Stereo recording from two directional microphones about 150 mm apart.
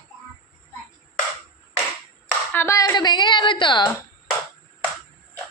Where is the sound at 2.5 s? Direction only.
15° left (ahead or behind); by 3.8 s 30° left (ahead or behind).